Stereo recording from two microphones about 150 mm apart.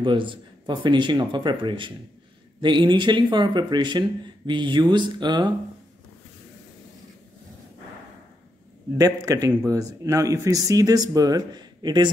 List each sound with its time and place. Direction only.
0.0 s speech: 35° right (ahead or behind)
8.9 s speech: 20° right (ahead or behind)